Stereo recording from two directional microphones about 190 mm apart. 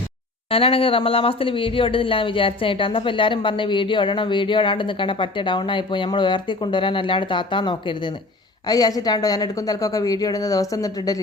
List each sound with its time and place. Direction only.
0.5 s speech: 30° left (ahead or behind)